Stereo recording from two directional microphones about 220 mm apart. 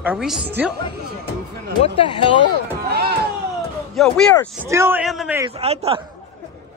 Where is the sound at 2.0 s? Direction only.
20° left (ahead or behind).